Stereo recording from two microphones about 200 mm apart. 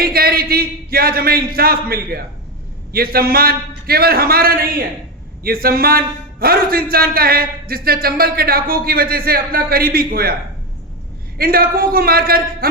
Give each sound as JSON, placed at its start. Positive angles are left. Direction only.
{"t": 0.0, "sound": "a man's voice", "side_deg": -50}
{"t": 11.3, "sound": "a man's voice", "side_deg": -50}